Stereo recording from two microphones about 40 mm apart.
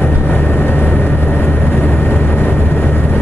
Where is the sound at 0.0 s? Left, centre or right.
Left.